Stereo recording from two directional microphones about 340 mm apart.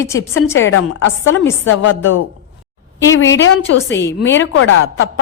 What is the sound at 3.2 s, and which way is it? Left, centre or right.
A woman's voice, left.